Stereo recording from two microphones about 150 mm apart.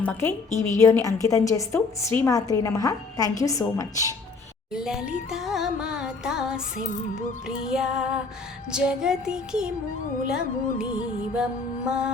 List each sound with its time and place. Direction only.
0.0 s a woman's voice: 15° left (ahead or behind)
4.7 s music: 5° right (ahead or behind)
11.9 s music: 5° right (ahead or behind)